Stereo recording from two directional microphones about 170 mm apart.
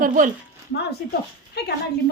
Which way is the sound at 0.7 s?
80° left.